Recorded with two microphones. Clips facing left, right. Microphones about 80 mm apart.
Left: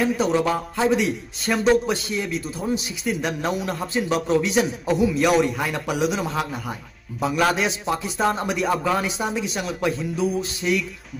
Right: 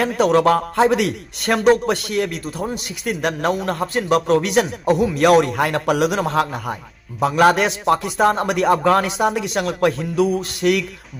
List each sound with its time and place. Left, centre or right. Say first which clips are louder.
0.0 s a man's voice: right 5 dB; right